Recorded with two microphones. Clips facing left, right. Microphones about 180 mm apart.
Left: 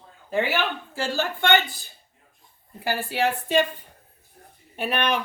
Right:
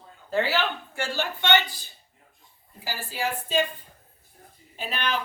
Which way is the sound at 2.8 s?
65° left (ahead or behind).